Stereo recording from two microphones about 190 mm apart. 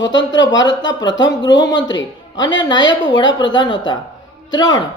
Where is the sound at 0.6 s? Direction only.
20° left (ahead or behind).